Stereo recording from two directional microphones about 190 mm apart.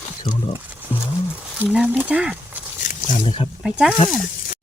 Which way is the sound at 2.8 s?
45° left (ahead or behind).